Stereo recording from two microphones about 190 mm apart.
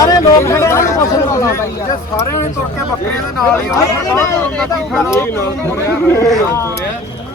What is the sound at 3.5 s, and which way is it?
Speech, 15° left (ahead or behind).